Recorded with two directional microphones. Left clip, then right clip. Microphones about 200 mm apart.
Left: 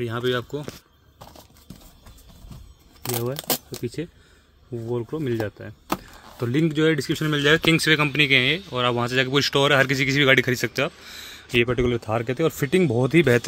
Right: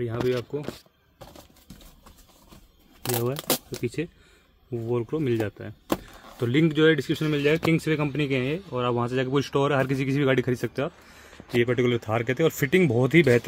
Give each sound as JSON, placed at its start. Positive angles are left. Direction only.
{"t": 0.0, "sound": "speech", "side_deg": 10}
{"t": 3.1, "sound": "speech", "side_deg": 0}
{"t": 7.8, "sound": "speech", "side_deg": 0}